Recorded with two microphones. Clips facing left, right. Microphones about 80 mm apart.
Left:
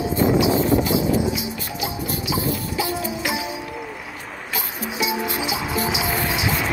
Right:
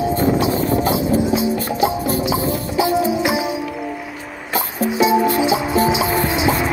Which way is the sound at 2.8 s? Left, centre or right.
Right.